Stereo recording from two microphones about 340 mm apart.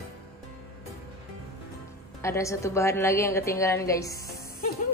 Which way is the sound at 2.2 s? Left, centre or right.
Centre.